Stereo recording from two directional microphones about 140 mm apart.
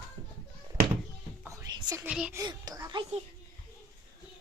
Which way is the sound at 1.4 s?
25° right (ahead or behind).